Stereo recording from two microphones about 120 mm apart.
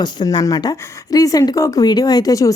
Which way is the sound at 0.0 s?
35° left (ahead or behind).